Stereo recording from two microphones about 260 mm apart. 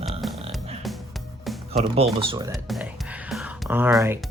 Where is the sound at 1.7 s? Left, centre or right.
Right.